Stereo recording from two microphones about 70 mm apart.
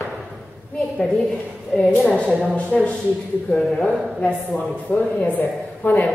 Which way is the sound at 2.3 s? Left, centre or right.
Centre.